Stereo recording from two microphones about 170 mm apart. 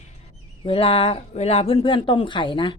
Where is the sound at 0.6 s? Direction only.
35° left (ahead or behind).